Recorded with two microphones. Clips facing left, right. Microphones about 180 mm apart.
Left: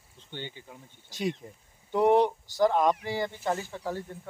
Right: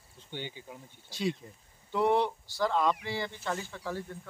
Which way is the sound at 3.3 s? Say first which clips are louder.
Left 5 dB; 15° left (ahead or behind).